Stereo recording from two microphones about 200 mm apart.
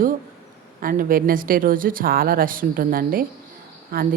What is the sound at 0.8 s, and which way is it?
A woman's voice, 45° right (ahead or behind).